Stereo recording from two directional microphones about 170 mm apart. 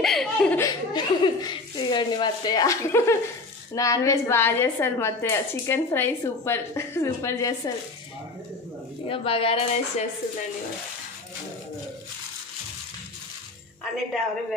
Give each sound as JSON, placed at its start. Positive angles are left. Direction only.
{"t": 0.0, "sound": "speech", "side_deg": 5}
{"t": 0.6, "sound": "a woman's voice", "side_deg": 25}
{"t": 9.1, "sound": "a woman's voice", "side_deg": 30}